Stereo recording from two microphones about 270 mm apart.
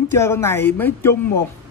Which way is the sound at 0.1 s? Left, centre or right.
Centre.